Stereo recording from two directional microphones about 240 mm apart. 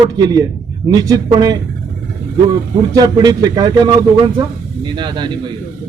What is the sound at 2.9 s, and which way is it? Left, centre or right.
A man's voice, centre.